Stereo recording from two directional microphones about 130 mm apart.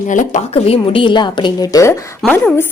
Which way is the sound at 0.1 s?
75° left (ahead or behind).